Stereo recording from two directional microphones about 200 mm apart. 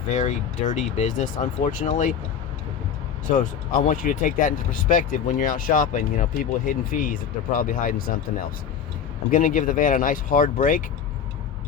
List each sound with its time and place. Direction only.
0.1 s speech: 35° left (ahead or behind)
3.2 s speech: 40° left (ahead or behind)